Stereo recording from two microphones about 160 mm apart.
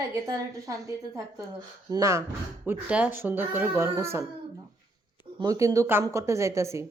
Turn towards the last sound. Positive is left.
turn(degrees=-20)  # may be behind; listen again after turning